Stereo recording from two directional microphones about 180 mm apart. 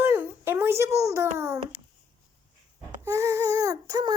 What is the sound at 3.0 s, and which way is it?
A child's voice, 15° right (ahead or behind).